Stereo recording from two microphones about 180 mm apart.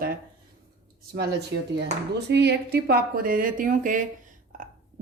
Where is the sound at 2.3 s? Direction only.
65° right (ahead or behind); by 4.1 s 45° right (ahead or behind).